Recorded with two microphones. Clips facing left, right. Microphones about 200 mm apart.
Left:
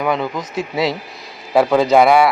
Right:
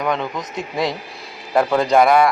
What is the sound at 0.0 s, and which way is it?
Speech, 5° left (ahead or behind).